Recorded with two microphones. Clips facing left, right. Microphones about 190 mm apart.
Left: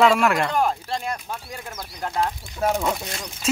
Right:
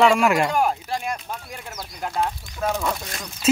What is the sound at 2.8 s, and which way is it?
Speech, 20° left (ahead or behind).